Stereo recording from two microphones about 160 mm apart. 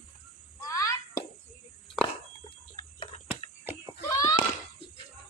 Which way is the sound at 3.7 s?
15° right (ahead or behind).